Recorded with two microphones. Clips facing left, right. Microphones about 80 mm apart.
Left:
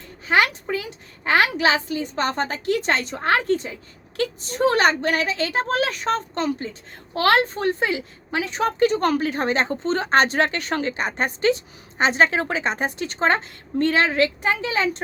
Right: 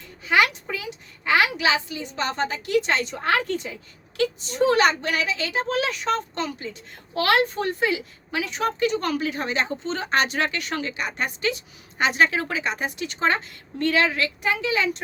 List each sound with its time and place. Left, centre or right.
0.3 s a woman's voice: left